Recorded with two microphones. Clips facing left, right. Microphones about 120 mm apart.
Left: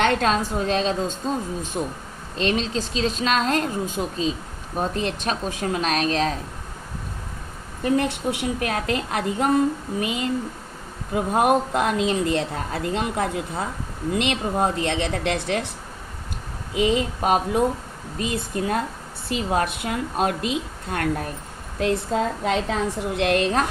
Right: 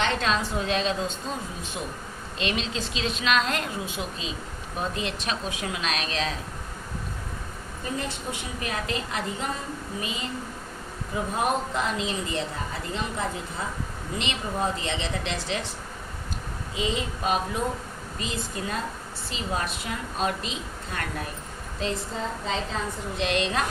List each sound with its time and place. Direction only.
0.0 s a woman's voice: 50° left (ahead or behind)
7.9 s speech: 65° left (ahead or behind)
16.7 s speech: 60° left (ahead or behind)